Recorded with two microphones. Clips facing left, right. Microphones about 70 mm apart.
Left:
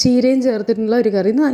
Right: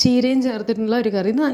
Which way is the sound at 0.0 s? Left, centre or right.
Left.